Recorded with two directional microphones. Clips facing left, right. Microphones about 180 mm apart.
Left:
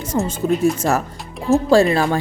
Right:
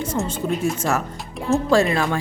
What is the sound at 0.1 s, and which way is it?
Speech, 40° left (ahead or behind).